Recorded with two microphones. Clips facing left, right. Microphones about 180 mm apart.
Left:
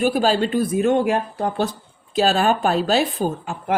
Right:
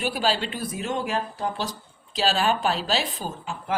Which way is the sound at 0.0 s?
45° left (ahead or behind).